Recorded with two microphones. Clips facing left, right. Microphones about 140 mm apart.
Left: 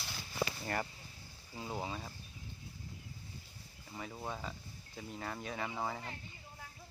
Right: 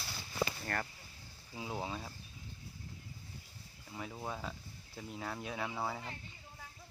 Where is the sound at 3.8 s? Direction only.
Centre (ahead or behind).